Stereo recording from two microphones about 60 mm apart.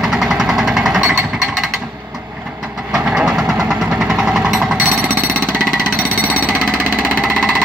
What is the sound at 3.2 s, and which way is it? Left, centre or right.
Vehicle, centre.